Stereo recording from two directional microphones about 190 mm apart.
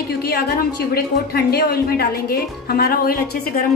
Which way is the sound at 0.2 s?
55° left (ahead or behind).